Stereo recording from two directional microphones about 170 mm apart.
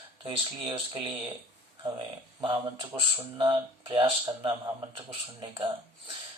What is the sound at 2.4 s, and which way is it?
Speech, 30° right (ahead or behind).